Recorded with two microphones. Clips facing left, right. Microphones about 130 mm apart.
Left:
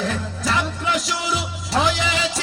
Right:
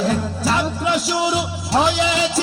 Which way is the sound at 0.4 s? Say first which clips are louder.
Right 2 dB; 35° right (ahead or behind).